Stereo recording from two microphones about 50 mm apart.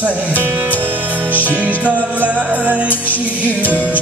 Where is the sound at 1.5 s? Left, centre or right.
Right.